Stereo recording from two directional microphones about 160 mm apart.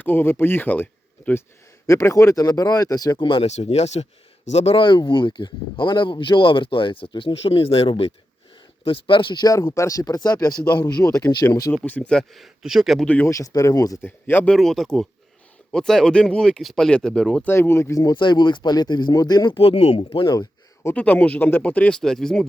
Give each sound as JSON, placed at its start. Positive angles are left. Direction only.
{"t": 0.0, "sound": "speech", "side_deg": 15}
{"t": 11.7, "sound": "speech", "side_deg": 10}
{"t": 19.5, "sound": "speech", "side_deg": 35}
{"t": 20.4, "sound": "speech", "side_deg": 10}